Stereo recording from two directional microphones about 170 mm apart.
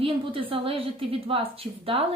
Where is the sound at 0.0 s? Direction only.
30° right (ahead or behind).